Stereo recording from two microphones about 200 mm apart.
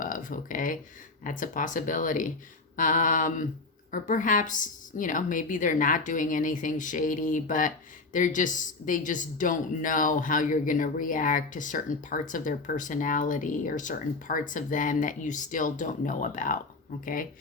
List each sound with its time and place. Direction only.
0.0 s speech: 40° left (ahead or behind)